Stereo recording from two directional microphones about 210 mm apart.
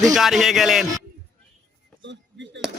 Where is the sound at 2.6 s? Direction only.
5° right (ahead or behind).